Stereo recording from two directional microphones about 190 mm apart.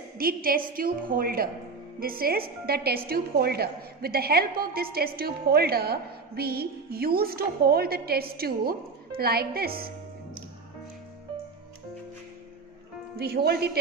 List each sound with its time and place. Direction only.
0.2 s a woman's voice: 50° right (ahead or behind)
13.1 s speech: 55° right (ahead or behind)